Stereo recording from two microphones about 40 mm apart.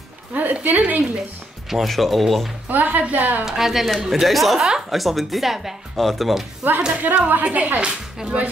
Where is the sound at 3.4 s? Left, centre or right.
Centre.